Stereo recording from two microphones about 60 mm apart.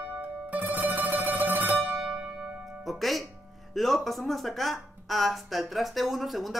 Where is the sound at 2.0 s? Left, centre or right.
Centre.